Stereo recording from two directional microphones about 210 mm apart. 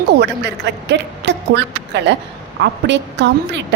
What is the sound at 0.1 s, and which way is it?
A woman's voice, 55° right (ahead or behind).